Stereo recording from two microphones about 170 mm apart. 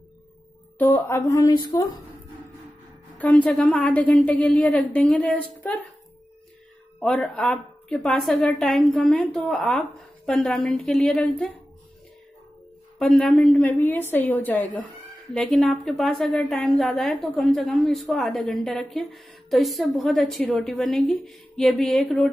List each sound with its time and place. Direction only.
0.7 s a woman's voice: 10° left (ahead or behind)
3.2 s a woman's voice: 10° left (ahead or behind)
7.0 s a woman's voice: 5° left (ahead or behind)
13.0 s a woman's voice: centre (ahead or behind)